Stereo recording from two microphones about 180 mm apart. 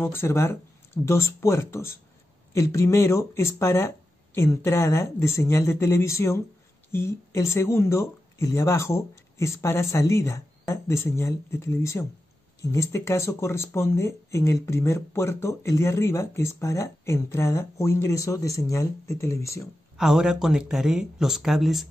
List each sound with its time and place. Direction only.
0.0 s speech: 15° left (ahead or behind)
20.0 s speech: centre (ahead or behind)